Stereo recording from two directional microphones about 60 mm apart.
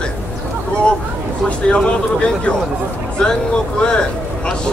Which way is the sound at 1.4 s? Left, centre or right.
Centre.